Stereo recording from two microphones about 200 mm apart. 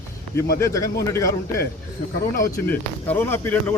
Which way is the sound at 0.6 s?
15° left (ahead or behind).